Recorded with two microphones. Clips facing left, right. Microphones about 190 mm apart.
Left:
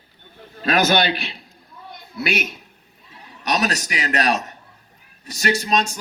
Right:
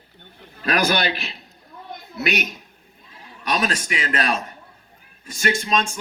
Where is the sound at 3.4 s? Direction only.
40° left (ahead or behind).